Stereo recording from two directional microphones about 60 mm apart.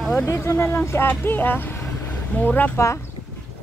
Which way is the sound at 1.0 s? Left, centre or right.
Left.